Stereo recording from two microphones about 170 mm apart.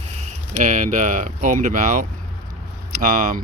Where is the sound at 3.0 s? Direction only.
50° right (ahead or behind).